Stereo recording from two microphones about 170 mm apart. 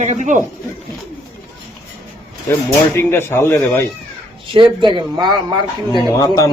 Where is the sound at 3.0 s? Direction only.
15° left (ahead or behind).